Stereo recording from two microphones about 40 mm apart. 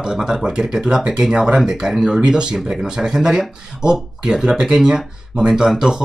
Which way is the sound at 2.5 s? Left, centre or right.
Centre.